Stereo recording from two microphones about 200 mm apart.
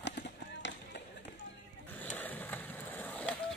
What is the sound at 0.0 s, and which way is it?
Run, 60° left (ahead or behind).